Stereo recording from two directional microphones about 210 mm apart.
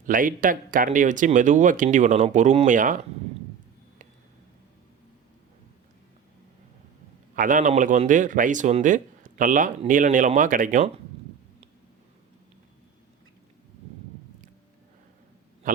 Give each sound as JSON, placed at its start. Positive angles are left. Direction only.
{"t": 0.0, "sound": "speech", "side_deg": -40}
{"t": 7.3, "sound": "speech", "side_deg": -40}
{"t": 15.6, "sound": "a sound", "side_deg": -40}